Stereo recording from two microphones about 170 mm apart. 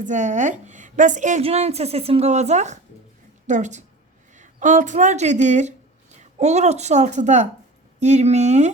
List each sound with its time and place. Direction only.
0.0 s a woman's voice: 45° right (ahead or behind)